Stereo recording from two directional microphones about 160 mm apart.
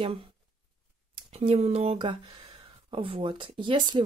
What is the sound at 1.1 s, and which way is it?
Speech, 40° right (ahead or behind).